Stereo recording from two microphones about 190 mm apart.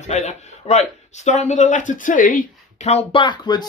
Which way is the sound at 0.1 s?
35° left (ahead or behind).